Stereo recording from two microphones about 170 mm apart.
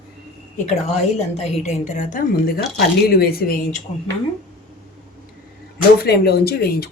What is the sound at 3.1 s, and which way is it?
Speech, 65° left (ahead or behind).